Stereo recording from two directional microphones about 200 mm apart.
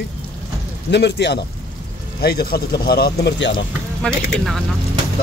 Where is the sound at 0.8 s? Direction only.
55° left (ahead or behind).